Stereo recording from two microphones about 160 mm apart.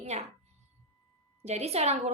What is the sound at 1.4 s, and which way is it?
Speech, 40° right (ahead or behind).